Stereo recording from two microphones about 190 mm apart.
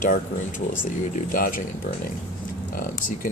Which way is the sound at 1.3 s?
45° left (ahead or behind).